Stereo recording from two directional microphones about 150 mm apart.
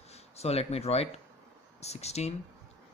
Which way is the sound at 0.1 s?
45° left (ahead or behind).